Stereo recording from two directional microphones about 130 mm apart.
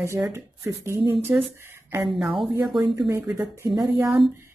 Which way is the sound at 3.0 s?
15° right (ahead or behind).